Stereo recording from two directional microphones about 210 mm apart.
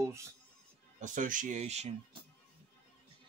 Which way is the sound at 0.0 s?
15° right (ahead or behind).